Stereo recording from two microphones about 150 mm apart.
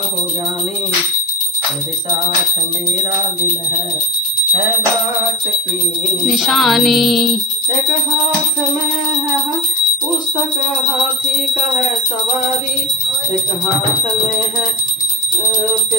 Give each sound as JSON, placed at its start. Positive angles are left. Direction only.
{"t": 6.3, "sound": "music", "side_deg": 0}